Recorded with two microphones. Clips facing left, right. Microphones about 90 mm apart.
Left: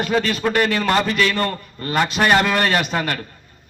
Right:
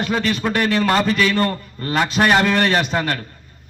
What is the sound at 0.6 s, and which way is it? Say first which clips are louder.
Speech: right 2 dB; 25° right (ahead or behind).